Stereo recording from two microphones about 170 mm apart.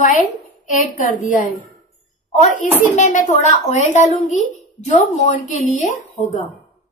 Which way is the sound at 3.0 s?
45° left (ahead or behind).